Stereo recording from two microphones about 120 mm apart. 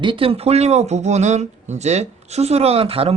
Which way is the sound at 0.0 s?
45° right (ahead or behind).